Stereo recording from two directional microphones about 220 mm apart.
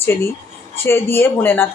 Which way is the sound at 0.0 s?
10° left (ahead or behind).